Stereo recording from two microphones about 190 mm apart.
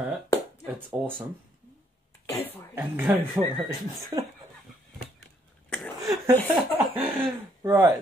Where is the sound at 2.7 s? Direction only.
10° right (ahead or behind).